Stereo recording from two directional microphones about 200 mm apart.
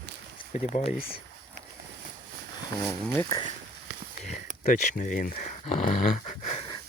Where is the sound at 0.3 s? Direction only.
35° left (ahead or behind).